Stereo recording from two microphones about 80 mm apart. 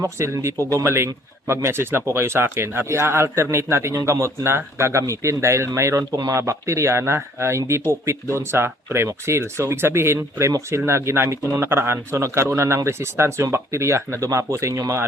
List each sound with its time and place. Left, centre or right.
0.0 s speech: right